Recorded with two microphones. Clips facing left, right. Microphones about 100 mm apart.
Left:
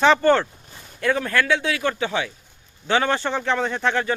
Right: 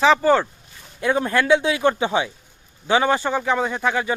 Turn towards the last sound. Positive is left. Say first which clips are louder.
# even
turn(degrees=-10)  # may be behind; listen again after turning